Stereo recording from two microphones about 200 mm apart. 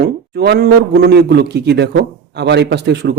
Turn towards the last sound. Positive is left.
turn(degrees=-55)  # may be behind; listen again after turning